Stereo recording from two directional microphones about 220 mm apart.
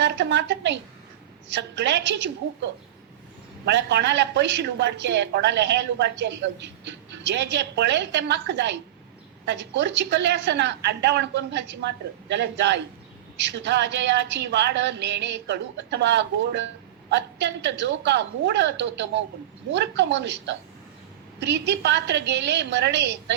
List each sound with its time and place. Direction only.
0.0 s a woman's voice: 50° right (ahead or behind)
3.7 s a woman's voice: 50° right (ahead or behind)